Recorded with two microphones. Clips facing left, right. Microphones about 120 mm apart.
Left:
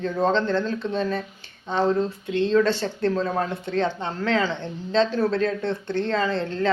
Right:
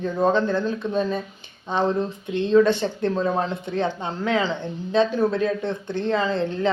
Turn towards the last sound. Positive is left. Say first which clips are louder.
# right 1 dB
turn(degrees=-15)  # may be behind; listen again after turning